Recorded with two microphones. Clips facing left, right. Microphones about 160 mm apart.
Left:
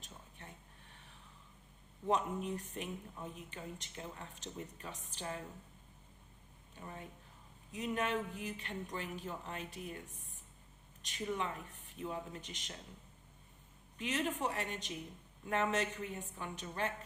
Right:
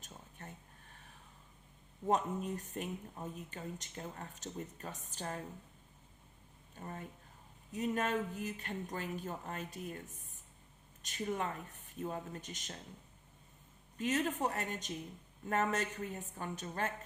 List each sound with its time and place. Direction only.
0.0 s a sound: 45° right (ahead or behind)
2.0 s speech: 45° right (ahead or behind)
7.7 s speech: 45° right (ahead or behind)
11.0 s speech: 45° right (ahead or behind)
14.0 s speech: 45° right (ahead or behind)